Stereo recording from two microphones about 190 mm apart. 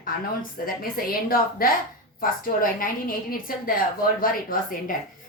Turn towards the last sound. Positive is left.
turn(degrees=50)  # may be behind; listen again after turning